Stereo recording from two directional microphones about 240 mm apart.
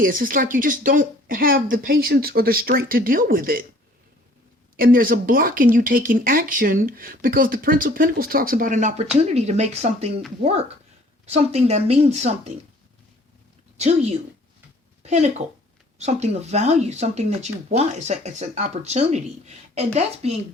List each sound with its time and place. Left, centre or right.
0.0 s speech: right
4.8 s speech: right
13.7 s speech: right